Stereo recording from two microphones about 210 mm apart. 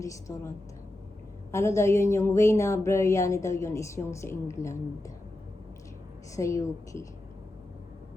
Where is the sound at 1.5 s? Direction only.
15° left (ahead or behind).